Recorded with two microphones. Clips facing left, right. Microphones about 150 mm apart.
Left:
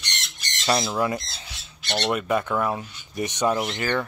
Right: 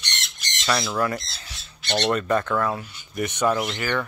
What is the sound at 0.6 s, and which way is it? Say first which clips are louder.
Speech: left 1 dB; 25° left (ahead or behind).